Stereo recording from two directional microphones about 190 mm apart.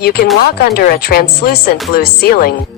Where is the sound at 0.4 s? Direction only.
55° left (ahead or behind).